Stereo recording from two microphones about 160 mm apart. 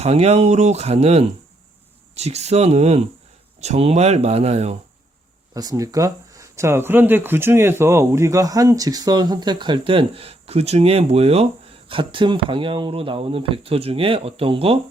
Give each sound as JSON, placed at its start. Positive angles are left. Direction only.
{"t": 0.0, "sound": "speech", "side_deg": -40}
{"t": 5.5, "sound": "speech", "side_deg": -20}